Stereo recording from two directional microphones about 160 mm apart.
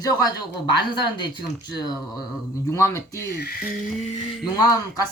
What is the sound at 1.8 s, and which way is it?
A woman's voice, 25° left (ahead or behind).